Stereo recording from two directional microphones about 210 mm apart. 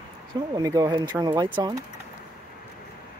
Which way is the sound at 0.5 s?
15° right (ahead or behind).